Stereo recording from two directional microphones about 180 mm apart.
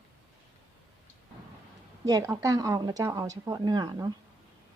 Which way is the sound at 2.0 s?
20° right (ahead or behind).